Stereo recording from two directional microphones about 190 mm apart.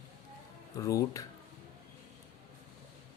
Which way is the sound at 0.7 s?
15° left (ahead or behind).